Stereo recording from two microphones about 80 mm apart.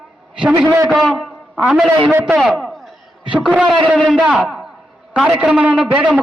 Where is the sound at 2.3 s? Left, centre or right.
Centre.